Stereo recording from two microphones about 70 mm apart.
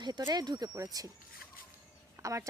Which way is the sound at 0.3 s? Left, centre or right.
Right.